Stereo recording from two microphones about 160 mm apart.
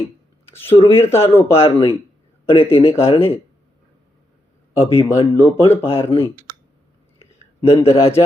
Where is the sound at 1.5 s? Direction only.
35° left (ahead or behind).